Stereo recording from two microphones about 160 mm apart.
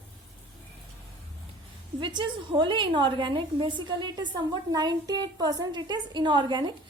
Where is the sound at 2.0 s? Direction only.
30° right (ahead or behind).